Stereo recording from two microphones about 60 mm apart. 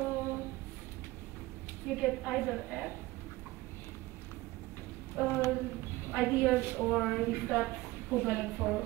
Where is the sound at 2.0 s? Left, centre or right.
Centre.